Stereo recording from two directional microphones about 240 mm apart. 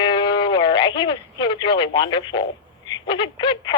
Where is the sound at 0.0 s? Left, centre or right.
Centre.